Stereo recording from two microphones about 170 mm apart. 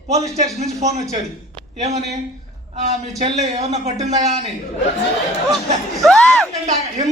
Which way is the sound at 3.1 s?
40° right (ahead or behind).